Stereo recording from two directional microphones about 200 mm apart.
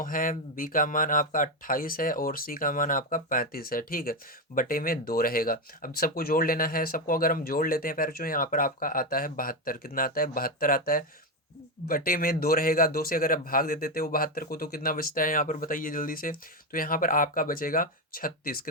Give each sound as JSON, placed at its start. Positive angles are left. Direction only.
{"t": 0.0, "sound": "speech", "side_deg": 45}